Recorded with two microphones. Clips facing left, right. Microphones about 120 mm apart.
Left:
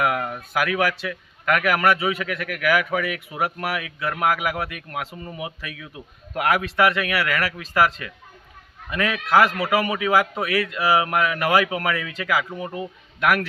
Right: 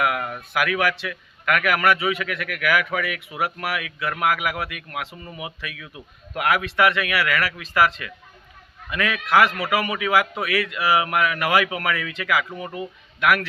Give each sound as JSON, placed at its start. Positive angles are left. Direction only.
{"t": 0.0, "sound": "a man's voice", "side_deg": 35}